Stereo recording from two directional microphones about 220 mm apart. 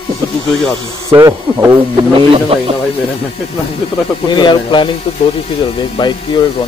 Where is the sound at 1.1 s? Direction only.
15° right (ahead or behind).